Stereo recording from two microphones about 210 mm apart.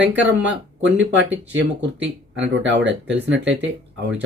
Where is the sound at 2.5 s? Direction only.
60° right (ahead or behind).